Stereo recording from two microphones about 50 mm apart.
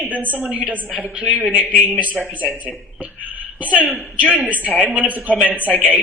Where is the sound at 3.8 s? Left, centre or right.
Right.